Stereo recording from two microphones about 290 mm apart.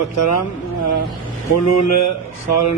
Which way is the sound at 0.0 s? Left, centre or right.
Left.